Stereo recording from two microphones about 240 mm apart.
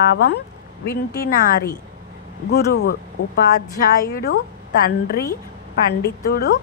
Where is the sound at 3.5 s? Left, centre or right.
Left.